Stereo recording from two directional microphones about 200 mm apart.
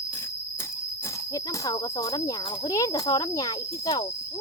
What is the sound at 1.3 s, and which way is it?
Speech, 15° left (ahead or behind).